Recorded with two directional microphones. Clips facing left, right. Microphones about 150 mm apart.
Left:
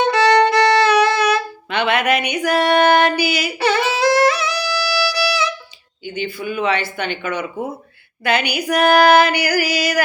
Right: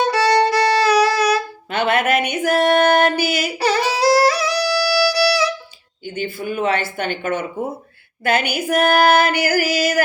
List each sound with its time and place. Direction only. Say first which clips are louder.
0.0 s violin: left 2 dB; 35° right (ahead or behind)
3.6 s music: left 1 dB; 35° right (ahead or behind)
6.1 s female singing: even; 45° right (ahead or behind)